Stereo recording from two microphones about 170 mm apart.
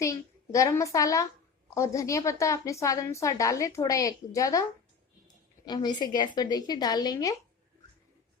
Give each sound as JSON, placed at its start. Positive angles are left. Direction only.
{"t": 0.0, "sound": "a child's voice", "side_deg": 20}
{"t": 5.6, "sound": "a woman's voice", "side_deg": 25}